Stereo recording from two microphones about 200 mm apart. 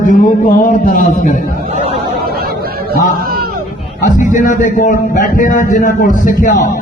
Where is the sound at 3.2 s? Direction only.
50° right (ahead or behind).